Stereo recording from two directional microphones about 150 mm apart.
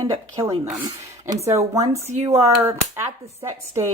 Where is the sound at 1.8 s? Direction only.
45° right (ahead or behind).